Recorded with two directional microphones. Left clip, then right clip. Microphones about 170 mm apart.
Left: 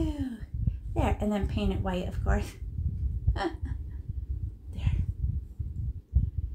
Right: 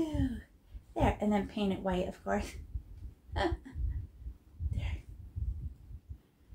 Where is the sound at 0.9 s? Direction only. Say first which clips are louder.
Left 1 dB; 20° left (ahead or behind).